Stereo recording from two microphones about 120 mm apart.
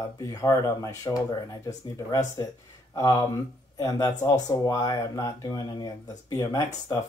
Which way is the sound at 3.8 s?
30° left (ahead or behind).